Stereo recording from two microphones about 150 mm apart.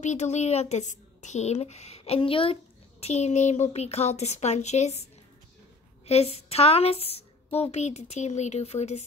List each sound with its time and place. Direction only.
0.0 s a woman's voice: 50° left (ahead or behind)
6.0 s a woman's voice: 45° left (ahead or behind)